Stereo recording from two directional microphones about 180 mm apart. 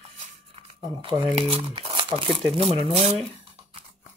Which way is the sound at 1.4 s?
30° right (ahead or behind).